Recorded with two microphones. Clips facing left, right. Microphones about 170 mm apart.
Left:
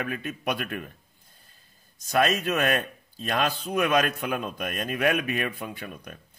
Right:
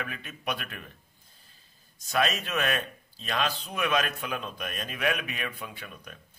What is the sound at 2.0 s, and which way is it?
A man's voice, 45° left (ahead or behind).